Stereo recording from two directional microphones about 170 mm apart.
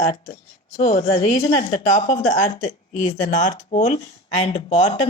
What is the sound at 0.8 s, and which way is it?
A woman's voice, 35° left (ahead or behind).